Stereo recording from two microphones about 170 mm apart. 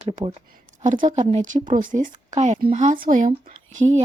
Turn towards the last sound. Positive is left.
turn(degrees=-50)  # may be behind; listen again after turning